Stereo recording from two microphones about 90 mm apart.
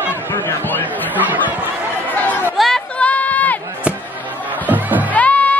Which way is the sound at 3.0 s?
15° left (ahead or behind).